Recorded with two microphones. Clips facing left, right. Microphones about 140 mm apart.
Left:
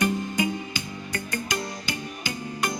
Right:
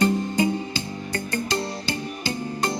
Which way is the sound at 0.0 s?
30° right (ahead or behind).